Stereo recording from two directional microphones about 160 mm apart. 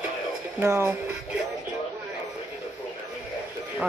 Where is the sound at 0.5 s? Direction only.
15° right (ahead or behind).